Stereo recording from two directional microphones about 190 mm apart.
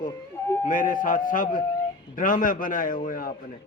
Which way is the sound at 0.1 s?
15° left (ahead or behind).